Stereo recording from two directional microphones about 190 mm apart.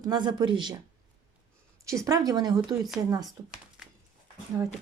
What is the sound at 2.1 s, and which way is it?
Speech, 20° right (ahead or behind).